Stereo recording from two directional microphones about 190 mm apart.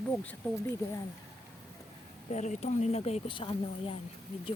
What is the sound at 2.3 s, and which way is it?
Speech, 40° left (ahead or behind).